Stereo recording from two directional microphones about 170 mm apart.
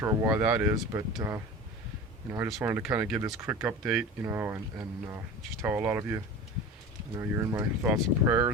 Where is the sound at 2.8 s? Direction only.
5° right (ahead or behind).